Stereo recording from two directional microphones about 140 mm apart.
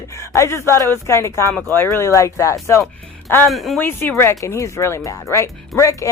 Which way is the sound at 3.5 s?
Centre (ahead or behind).